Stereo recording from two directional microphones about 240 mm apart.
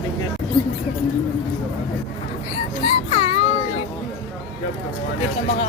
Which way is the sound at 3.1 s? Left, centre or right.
Left.